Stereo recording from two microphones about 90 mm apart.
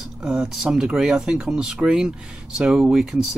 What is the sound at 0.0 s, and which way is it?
Speech, 5° right (ahead or behind).